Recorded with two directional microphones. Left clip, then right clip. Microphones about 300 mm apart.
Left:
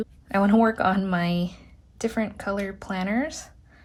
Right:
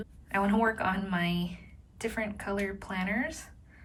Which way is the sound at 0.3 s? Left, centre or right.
Centre.